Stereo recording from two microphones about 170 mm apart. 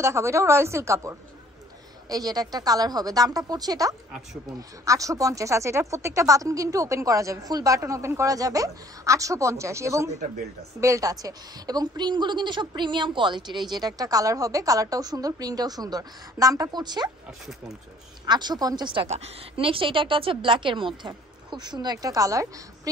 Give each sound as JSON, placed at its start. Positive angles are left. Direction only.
{"t": 0.0, "sound": "speech", "side_deg": -15}
{"t": 18.2, "sound": "speech", "side_deg": -25}
{"t": 19.0, "sound": "speech", "side_deg": -40}